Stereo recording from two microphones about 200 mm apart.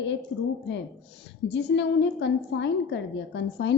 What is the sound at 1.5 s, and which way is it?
A woman's voice, 60° left (ahead or behind).